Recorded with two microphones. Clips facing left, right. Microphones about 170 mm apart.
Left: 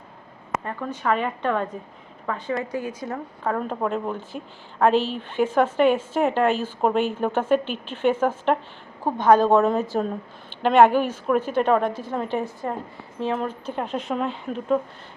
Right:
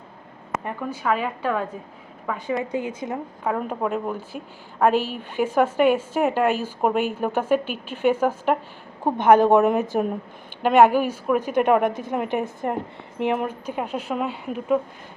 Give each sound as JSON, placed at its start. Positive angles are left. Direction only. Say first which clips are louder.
{"t": 0.6, "sound": "a woman's voice", "louder": "right 1 dB", "side_deg": -10}
{"t": 2.7, "sound": "a woman's voice", "louder": "right 2 dB", "side_deg": -20}